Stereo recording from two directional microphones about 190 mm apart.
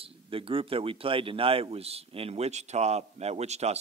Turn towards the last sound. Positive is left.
turn(degrees=-35)  # may be behind; listen again after turning